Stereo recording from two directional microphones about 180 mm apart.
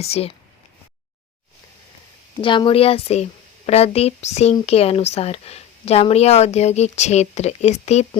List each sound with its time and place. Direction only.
0.0 s speech: 35° left (ahead or behind)
2.4 s speech: 30° left (ahead or behind)